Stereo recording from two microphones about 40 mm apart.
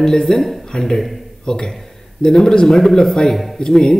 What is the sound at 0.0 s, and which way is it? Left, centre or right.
A man's voice, centre.